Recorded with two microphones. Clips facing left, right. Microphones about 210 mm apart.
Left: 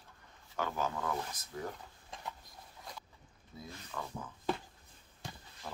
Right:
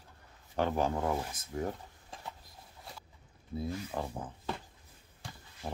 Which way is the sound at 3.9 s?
35° right (ahead or behind).